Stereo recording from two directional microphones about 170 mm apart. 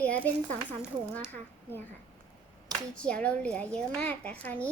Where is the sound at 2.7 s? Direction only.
25° right (ahead or behind).